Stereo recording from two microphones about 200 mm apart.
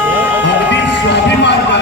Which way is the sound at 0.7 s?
60° left (ahead or behind).